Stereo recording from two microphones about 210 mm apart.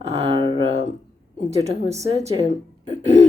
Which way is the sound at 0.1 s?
30° right (ahead or behind).